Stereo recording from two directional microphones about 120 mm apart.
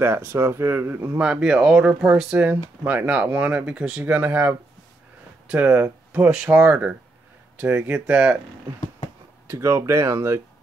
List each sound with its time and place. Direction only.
0.0 s speech: 20° right (ahead or behind)
9.5 s speech: 25° right (ahead or behind)